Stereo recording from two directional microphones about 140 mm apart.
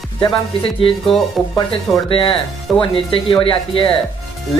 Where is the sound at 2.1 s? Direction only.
40° left (ahead or behind).